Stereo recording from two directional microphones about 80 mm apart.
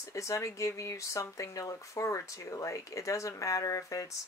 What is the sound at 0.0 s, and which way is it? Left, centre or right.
Speech, left.